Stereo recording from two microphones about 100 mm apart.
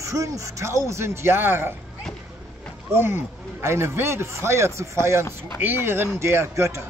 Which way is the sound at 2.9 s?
25° right (ahead or behind).